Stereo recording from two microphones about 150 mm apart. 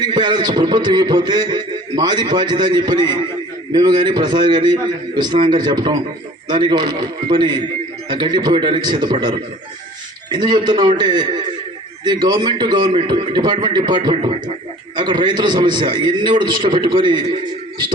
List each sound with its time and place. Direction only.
0.0 s a man's voice: 30° right (ahead or behind)